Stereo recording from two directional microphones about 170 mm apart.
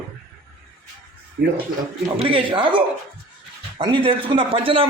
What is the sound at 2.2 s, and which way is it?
Speech, 30° right (ahead or behind).